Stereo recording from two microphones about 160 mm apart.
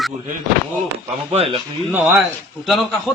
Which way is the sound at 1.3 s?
35° right (ahead or behind).